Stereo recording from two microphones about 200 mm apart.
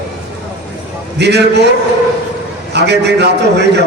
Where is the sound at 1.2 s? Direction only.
55° right (ahead or behind).